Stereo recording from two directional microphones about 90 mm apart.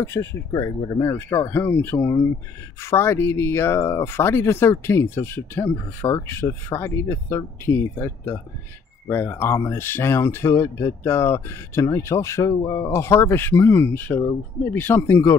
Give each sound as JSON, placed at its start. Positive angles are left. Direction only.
{"t": 0.0, "sound": "speech", "side_deg": 30}
{"t": 1.5, "sound": "speech", "side_deg": 25}